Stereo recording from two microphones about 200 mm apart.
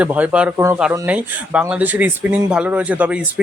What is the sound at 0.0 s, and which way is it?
Speech, 5° right (ahead or behind).